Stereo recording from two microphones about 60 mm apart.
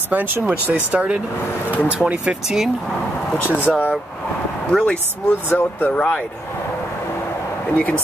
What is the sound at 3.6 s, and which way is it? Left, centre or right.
Speech, left.